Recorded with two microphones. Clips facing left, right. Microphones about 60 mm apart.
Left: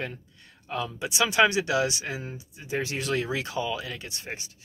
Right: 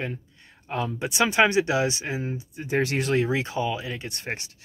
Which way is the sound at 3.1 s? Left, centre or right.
Right.